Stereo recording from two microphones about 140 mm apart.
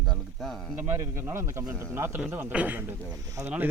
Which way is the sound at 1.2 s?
20° right (ahead or behind).